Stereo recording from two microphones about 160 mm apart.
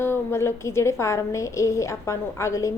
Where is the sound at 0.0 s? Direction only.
15° left (ahead or behind).